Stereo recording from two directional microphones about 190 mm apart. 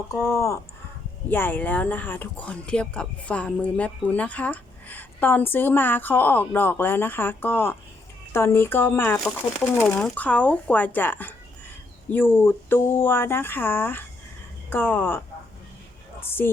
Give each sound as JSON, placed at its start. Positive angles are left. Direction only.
{"t": 0.1, "sound": "speech", "side_deg": 15}
{"t": 16.4, "sound": "speech", "side_deg": 10}